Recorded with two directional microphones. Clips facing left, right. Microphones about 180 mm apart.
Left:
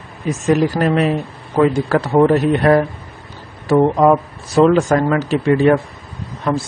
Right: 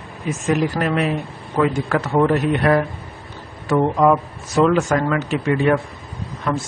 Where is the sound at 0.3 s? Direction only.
35° left (ahead or behind).